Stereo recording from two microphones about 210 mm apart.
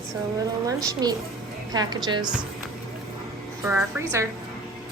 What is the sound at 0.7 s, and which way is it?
A woman's voice, 20° right (ahead or behind).